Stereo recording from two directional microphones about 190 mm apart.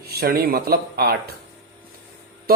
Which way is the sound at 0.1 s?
55° right (ahead or behind).